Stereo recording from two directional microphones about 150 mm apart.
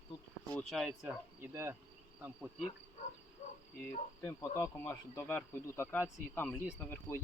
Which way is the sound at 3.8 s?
20° left (ahead or behind).